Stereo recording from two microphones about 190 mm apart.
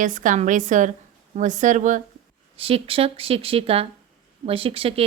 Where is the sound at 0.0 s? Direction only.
45° right (ahead or behind).